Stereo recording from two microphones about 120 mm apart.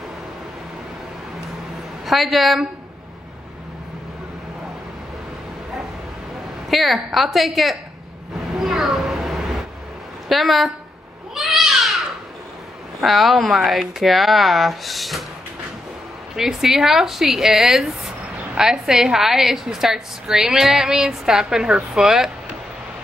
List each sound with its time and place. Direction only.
2.0 s speech: centre (ahead or behind)
6.7 s speech: centre (ahead or behind)
8.5 s a sound: centre (ahead or behind)
10.2 s a woman's voice: centre (ahead or behind)
11.3 s a sound: centre (ahead or behind)
13.0 s speech: centre (ahead or behind)
16.3 s speech: 5° right (ahead or behind)